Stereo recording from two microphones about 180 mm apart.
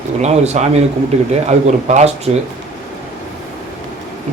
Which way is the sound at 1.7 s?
40° right (ahead or behind).